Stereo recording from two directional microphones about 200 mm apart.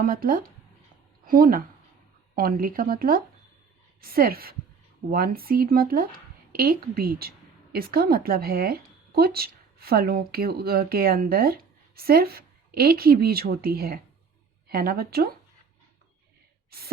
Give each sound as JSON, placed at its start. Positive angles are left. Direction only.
{"t": 0.0, "sound": "speech", "side_deg": -45}